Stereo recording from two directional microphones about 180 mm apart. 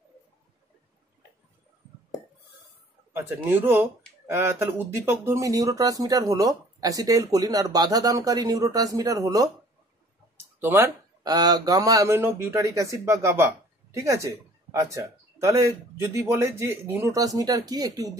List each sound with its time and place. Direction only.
3.4 s speech: 10° right (ahead or behind)
10.6 s speech: 15° right (ahead or behind)